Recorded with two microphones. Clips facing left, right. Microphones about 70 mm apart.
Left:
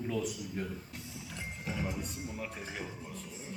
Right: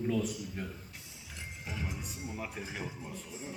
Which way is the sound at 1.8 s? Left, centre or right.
Centre.